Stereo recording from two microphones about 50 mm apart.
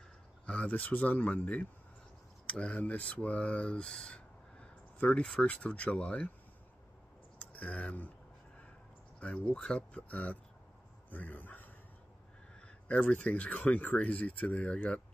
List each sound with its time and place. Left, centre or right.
0.5 s speech: left
2.4 s speech: centre
4.1 s a sound: left
5.4 s speech: left
7.5 s speech: left
9.2 s speech: left
12.8 s speech: left
13.8 s speech: centre